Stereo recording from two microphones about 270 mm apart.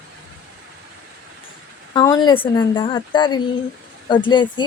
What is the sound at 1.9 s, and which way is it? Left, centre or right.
Speech, centre.